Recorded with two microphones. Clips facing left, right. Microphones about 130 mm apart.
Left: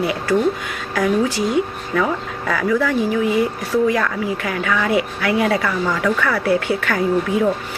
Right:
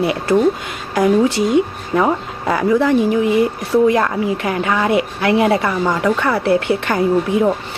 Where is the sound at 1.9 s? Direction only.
25° right (ahead or behind).